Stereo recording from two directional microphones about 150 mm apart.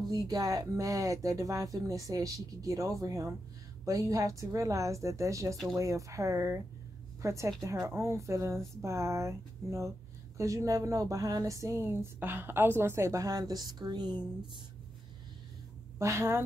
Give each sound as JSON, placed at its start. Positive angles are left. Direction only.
{"t": 0.1, "sound": "speech", "side_deg": -25}
{"t": 16.0, "sound": "a woman's voice", "side_deg": -20}